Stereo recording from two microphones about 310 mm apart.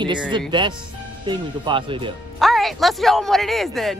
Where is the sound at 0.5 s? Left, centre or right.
Centre.